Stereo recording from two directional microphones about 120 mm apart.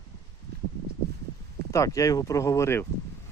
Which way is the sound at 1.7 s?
25° left (ahead or behind).